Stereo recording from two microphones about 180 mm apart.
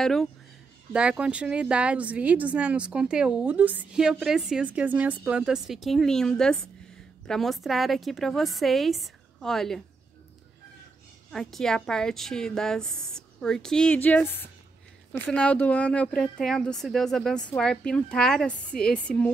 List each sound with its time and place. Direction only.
0.0 s a woman's voice: centre (ahead or behind)
11.3 s a woman's voice: centre (ahead or behind)
15.2 s a woman's voice: 5° left (ahead or behind)